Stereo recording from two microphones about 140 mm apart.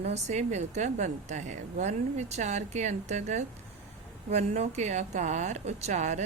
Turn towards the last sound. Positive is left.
turn(degrees=-55)  # may be behind; listen again after turning